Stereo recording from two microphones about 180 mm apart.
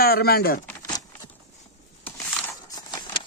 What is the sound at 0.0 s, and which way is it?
Speech, 60° left (ahead or behind).